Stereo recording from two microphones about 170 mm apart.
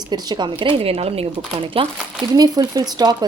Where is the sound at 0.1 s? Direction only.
25° right (ahead or behind).